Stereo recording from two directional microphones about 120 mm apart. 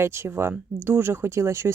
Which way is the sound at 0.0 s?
20° right (ahead or behind).